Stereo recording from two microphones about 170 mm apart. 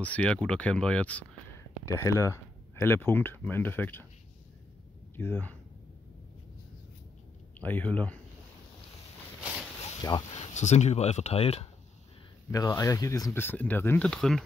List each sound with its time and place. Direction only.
0.0 s speech: 5° left (ahead or behind)
1.9 s speech: 15° left (ahead or behind)
5.1 s speech: 10° left (ahead or behind)
7.5 s speech: 10° left (ahead or behind)
10.3 s speech: 45° left (ahead or behind)
12.4 s speech: 20° left (ahead or behind); by 14.4 s 5° left (ahead or behind)